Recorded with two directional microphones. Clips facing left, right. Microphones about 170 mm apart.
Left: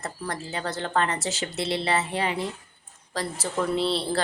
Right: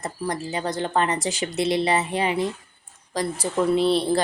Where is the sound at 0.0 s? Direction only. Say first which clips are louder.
Right 5 dB; 15° right (ahead or behind).